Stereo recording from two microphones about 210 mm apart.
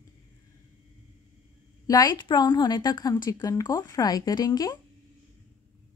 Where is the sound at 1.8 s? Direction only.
20° left (ahead or behind).